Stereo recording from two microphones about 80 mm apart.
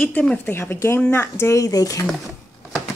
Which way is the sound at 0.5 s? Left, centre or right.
Left.